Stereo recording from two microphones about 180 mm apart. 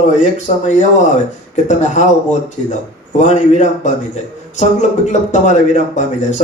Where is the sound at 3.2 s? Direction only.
40° left (ahead or behind).